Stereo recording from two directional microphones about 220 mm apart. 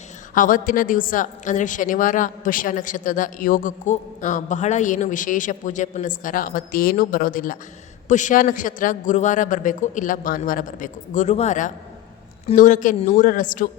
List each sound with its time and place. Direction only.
0.3 s a woman's voice: 40° left (ahead or behind)